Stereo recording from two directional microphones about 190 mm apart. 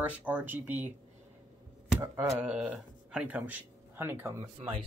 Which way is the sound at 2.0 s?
10° right (ahead or behind).